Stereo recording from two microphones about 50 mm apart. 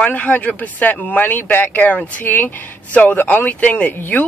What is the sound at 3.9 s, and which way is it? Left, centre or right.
Speech, left.